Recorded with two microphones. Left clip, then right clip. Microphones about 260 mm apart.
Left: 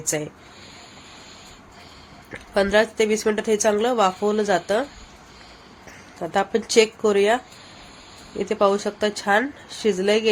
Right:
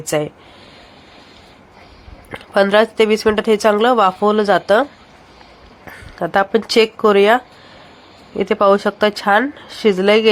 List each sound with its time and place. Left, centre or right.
0.0 s speech: centre
2.3 s speech: centre
6.1 s speech: centre